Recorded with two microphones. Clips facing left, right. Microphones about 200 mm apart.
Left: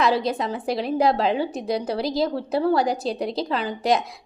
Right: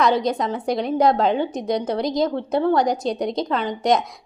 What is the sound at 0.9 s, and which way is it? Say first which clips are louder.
Speech: right 2 dB; 30° left (ahead or behind).